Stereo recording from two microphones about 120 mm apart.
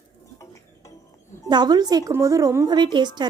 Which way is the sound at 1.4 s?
35° right (ahead or behind).